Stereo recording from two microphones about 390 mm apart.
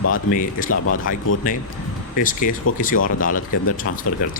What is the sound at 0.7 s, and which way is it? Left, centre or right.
Speech, left.